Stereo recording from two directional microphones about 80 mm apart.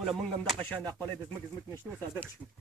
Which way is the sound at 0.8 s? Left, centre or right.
Left.